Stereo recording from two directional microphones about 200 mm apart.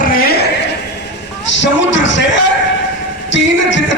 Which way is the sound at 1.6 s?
65° left (ahead or behind).